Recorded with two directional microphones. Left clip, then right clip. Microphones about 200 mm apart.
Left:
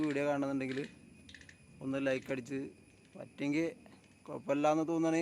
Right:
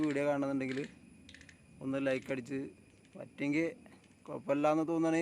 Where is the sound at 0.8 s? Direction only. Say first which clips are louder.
Even; 60° right (ahead or behind).